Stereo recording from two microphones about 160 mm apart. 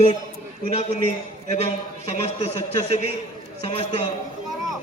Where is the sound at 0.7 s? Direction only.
45° left (ahead or behind).